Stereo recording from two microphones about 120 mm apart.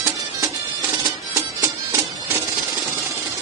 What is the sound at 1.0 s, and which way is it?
Music, 25° right (ahead or behind).